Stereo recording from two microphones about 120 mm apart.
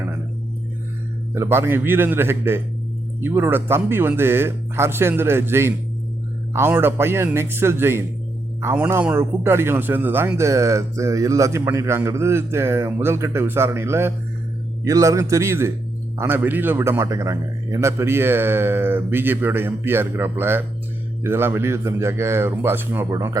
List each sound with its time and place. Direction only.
1.3 s a man's voice: 20° right (ahead or behind)